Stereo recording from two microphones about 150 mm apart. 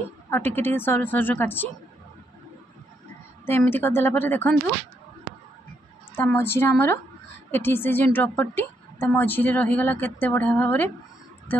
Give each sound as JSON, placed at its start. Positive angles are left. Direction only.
{"t": 0.3, "sound": "a woman's voice", "side_deg": 15}
{"t": 3.4, "sound": "a woman's voice", "side_deg": 15}
{"t": 6.1, "sound": "a woman's voice", "side_deg": 15}